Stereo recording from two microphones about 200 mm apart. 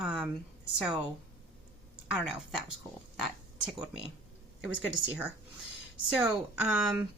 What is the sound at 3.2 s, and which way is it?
Speech, 5° right (ahead or behind).